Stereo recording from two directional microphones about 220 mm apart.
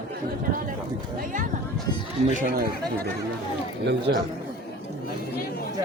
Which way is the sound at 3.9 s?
50° right (ahead or behind).